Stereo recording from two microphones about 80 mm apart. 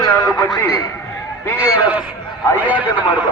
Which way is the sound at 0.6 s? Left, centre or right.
Left.